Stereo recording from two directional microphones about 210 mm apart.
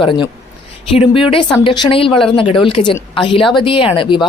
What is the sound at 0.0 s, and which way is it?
Speech, 25° left (ahead or behind).